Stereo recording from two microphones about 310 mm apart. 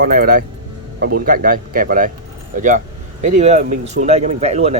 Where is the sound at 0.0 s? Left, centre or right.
Right.